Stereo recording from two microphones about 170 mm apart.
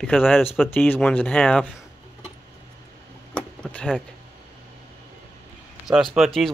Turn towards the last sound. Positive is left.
turn(degrees=0)  # may be behind; listen again after turning